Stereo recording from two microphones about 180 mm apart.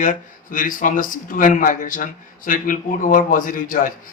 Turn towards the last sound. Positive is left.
turn(degrees=50)  # may be behind; listen again after turning